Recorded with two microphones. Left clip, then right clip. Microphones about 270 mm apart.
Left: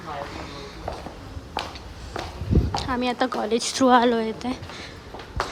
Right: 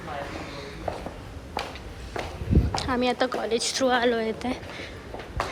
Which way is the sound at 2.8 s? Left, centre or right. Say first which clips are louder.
Even; centre.